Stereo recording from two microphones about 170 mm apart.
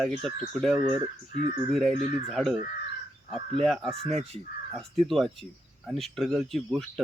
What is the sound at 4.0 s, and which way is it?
Speech, 40° right (ahead or behind).